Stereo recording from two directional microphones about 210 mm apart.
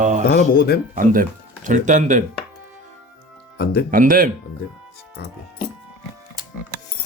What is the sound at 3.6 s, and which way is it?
Speech, 50° left (ahead or behind).